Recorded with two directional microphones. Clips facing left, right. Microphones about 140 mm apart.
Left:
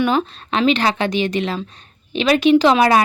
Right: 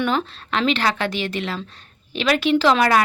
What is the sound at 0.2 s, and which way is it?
A woman's voice, 15° left (ahead or behind).